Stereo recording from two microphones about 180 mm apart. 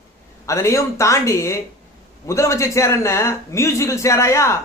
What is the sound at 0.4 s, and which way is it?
A man's voice, 15° left (ahead or behind).